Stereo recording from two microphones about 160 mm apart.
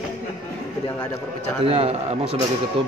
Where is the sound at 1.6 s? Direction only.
40° right (ahead or behind).